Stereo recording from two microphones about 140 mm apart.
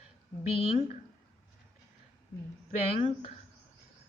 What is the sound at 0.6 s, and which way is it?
Speech, 45° left (ahead or behind).